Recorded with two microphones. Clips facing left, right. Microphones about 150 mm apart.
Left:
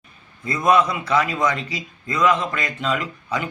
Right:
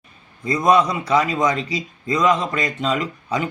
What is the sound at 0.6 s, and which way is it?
Speech, 35° right (ahead or behind).